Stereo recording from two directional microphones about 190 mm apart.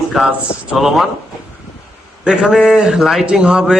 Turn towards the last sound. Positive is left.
turn(degrees=-5)  # may be behind; listen again after turning